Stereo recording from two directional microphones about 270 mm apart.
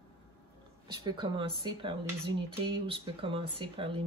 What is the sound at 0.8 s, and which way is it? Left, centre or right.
Speech, centre.